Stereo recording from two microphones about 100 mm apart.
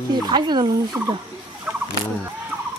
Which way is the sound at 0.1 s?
45° right (ahead or behind).